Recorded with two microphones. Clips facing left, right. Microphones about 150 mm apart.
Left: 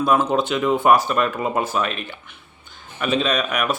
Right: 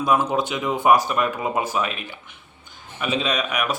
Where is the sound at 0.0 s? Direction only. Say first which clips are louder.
Left 2 dB; 15° right (ahead or behind).